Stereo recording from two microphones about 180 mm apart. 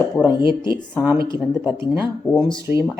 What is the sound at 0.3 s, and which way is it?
Speech, 25° left (ahead or behind).